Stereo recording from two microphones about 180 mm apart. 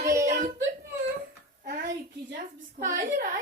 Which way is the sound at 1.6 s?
60° right (ahead or behind).